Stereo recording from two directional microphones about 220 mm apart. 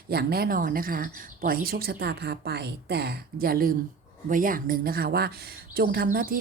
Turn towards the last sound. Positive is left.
turn(degrees=-40)  # may be behind; listen again after turning